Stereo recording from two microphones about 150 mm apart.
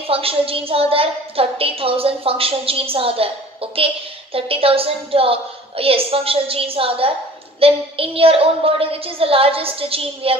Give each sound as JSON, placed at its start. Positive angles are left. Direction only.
{"t": 0.1, "sound": "a woman's voice", "side_deg": -40}